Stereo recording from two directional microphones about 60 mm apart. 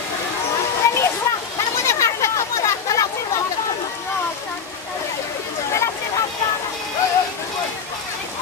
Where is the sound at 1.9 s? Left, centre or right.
Left.